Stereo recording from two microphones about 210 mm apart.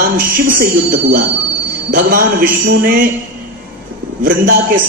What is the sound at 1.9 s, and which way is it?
A man's voice, 40° right (ahead or behind).